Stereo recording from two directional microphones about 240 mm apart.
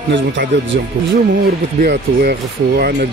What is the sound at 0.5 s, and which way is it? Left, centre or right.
Speech, right.